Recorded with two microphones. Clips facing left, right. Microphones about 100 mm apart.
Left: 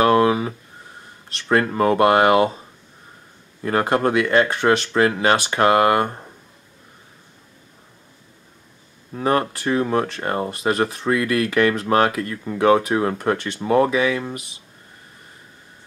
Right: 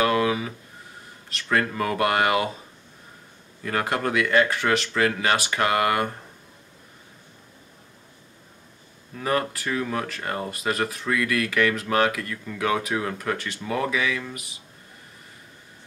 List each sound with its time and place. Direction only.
0.0 s a sound: 35° left (ahead or behind)
1.3 s speech: 30° left (ahead or behind)
3.6 s speech: 30° left (ahead or behind)
9.1 s speech: 30° left (ahead or behind)